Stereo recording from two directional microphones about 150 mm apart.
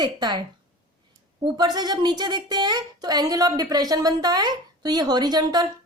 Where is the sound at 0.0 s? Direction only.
30° right (ahead or behind).